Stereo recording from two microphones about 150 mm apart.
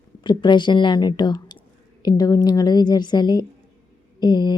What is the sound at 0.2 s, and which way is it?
A woman's voice, 30° left (ahead or behind).